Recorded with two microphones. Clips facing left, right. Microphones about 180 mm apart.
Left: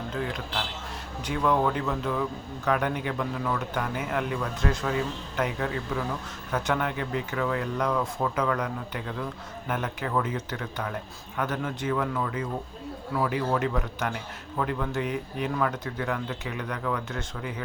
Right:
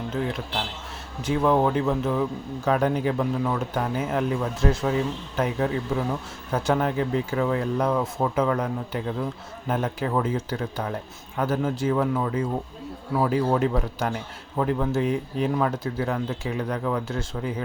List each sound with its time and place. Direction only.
1.2 s speech: 25° right (ahead or behind)